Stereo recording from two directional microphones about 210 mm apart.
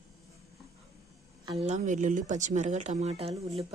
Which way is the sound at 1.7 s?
35° right (ahead or behind).